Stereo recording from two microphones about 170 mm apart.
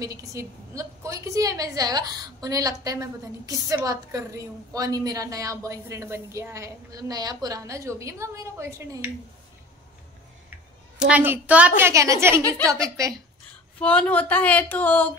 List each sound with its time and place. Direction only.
0.0 s a woman's voice: 20° right (ahead or behind)
11.1 s a woman's voice: 10° right (ahead or behind)
13.7 s speech: 10° left (ahead or behind)